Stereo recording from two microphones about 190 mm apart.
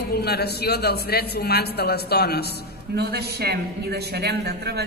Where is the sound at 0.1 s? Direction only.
55° left (ahead or behind).